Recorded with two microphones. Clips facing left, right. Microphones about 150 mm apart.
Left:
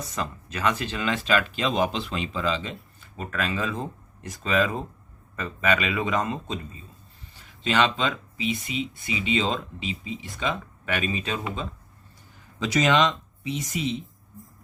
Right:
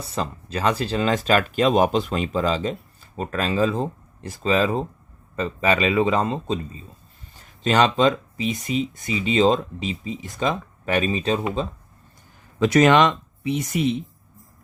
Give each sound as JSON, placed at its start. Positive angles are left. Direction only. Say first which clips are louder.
{"t": 0.1, "sound": "speech", "louder": "right 9 dB", "side_deg": -30}
{"t": 7.6, "sound": "speech", "louder": "right 6 dB", "side_deg": -45}
{"t": 12.5, "sound": "speech", "louder": "right 6 dB", "side_deg": -55}